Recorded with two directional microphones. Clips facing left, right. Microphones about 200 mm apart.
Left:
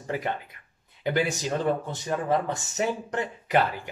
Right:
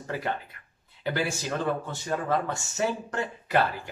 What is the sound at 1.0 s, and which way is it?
Speech, 20° left (ahead or behind).